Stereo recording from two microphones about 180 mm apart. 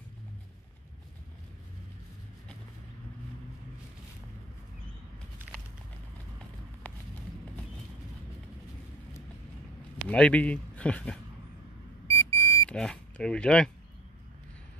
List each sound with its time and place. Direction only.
6.8 s a sound: 10° left (ahead or behind)
9.9 s a man's voice: 5° left (ahead or behind)
12.1 s vehicle: 15° left (ahead or behind)
12.6 s speech: 5° left (ahead or behind)